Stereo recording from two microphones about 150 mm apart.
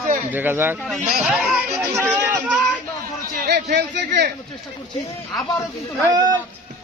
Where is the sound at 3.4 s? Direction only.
90° right.